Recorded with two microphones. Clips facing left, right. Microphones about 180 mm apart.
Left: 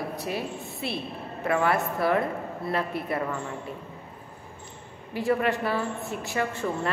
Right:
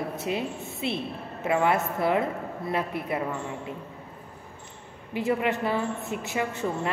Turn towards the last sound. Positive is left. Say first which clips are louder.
# even
turn(degrees=-20)  # may be behind; listen again after turning